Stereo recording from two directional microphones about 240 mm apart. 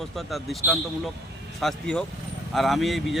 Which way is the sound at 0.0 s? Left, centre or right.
Centre.